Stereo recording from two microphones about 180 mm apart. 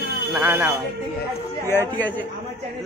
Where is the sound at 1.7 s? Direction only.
10° left (ahead or behind).